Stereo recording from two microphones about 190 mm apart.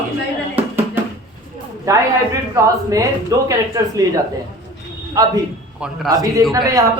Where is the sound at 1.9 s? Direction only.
15° right (ahead or behind).